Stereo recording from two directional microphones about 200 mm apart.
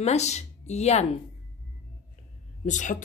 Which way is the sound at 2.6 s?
40° left (ahead or behind).